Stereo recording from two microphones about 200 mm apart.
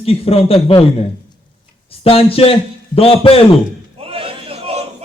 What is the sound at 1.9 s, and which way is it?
A man's voice, 30° left (ahead or behind).